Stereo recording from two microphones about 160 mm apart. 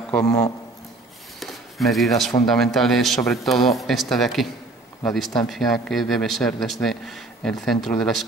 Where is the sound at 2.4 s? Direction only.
Centre (ahead or behind).